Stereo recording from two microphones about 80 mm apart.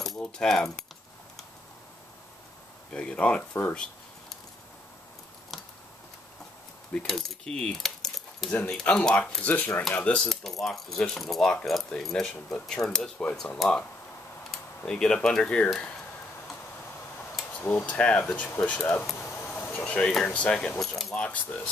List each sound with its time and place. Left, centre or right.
0.2 s speech: centre
2.9 s speech: centre
3.7 s a sound: centre
5.5 s a sound: centre
7.1 s speech: centre
9.4 s speech: centre
10.3 s coin: centre
11.6 s speech: centre
14.9 s speech: centre
17.6 s speech: left
19.2 s a sound: left
20.0 s speech: centre